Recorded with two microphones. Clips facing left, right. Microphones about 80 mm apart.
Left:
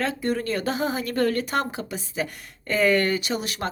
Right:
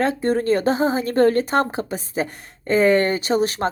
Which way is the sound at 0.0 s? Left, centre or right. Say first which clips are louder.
Right 6 dB; right.